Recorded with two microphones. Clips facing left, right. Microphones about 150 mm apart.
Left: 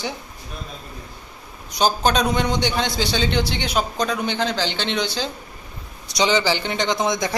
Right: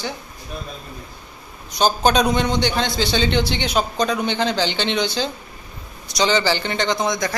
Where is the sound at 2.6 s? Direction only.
15° left (ahead or behind).